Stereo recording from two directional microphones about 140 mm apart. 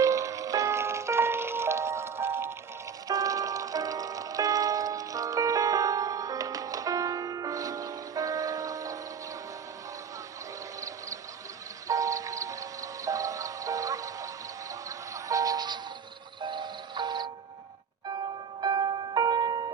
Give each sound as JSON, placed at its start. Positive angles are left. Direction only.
{"t": 0.0, "sound": "music", "side_deg": -20}
{"t": 10.8, "sound": "a sound", "side_deg": -25}
{"t": 11.9, "sound": "music", "side_deg": -25}
{"t": 18.6, "sound": "music", "side_deg": -30}